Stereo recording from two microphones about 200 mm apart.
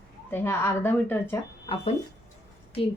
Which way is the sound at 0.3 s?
10° left (ahead or behind).